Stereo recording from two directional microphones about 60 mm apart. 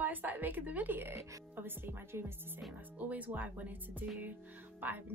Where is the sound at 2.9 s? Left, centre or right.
Right.